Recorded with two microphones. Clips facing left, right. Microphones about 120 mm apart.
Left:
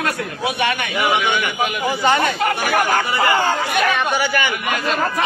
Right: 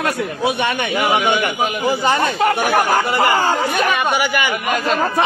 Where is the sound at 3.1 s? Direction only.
30° right (ahead or behind).